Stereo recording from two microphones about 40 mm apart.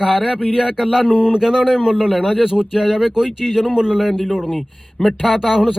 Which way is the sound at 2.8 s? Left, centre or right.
Centre.